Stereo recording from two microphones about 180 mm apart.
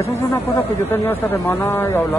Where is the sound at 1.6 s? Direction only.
15° left (ahead or behind).